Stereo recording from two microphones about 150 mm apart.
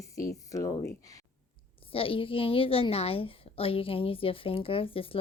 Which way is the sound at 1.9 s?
35° left (ahead or behind).